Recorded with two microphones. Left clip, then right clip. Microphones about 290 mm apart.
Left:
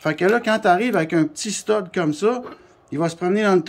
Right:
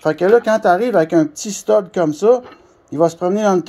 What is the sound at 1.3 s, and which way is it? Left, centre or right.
Speech, centre.